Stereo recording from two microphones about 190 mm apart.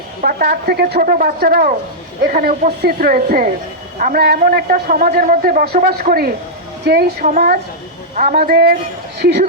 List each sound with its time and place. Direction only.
0.2 s a man's voice: 50° right (ahead or behind)